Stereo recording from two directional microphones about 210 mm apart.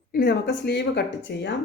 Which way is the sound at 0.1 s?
45° left (ahead or behind).